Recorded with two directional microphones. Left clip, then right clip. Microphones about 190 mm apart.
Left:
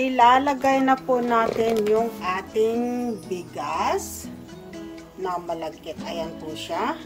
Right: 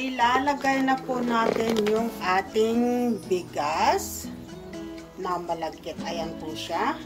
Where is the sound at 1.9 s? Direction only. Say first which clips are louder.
Left 1 dB; centre (ahead or behind).